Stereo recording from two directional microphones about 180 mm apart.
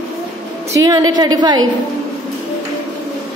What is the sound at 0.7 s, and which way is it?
Speech, 20° right (ahead or behind).